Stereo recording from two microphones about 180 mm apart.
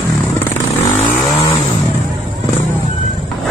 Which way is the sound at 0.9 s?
35° left (ahead or behind).